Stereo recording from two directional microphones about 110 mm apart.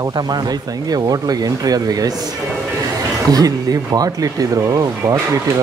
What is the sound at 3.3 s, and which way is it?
Speech, 35° right (ahead or behind).